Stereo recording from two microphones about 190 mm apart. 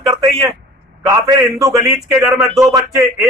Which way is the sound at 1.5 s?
15° right (ahead or behind).